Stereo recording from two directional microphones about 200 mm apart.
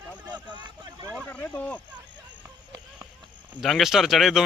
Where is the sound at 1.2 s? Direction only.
10° left (ahead or behind).